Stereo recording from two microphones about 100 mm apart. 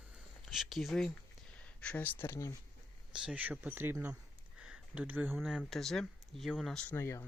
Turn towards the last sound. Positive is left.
turn(degrees=25)  # may be behind; listen again after turning